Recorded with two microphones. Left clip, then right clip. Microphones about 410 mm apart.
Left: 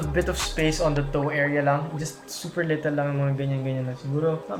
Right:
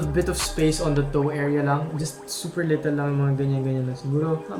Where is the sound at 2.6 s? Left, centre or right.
Left.